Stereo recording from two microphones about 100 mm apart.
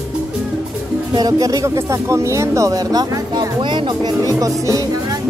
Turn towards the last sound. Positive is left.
turn(degrees=-35)  # may be behind; listen again after turning